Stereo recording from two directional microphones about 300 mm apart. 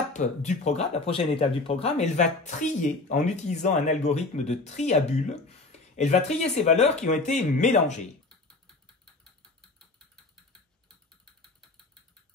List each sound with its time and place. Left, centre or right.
0.1 s speech: left